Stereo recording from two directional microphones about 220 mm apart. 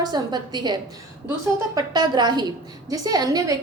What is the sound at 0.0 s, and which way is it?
A woman's voice, 20° right (ahead or behind).